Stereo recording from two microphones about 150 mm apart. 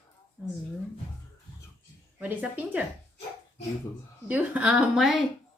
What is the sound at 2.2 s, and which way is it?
Speech, 10° right (ahead or behind).